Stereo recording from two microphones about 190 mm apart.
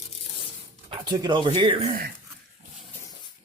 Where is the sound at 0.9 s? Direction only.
25° right (ahead or behind).